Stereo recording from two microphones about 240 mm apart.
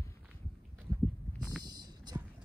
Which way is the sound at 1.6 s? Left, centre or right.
Centre.